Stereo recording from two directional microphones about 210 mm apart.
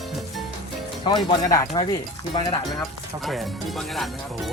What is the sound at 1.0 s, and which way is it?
Speech, 20° left (ahead or behind).